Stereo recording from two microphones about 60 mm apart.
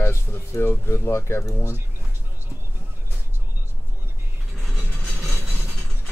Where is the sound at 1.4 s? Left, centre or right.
Left.